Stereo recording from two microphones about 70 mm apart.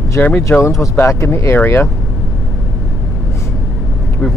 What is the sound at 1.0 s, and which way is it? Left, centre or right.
Speech, left.